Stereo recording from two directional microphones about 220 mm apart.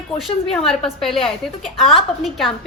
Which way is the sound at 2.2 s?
Centre (ahead or behind).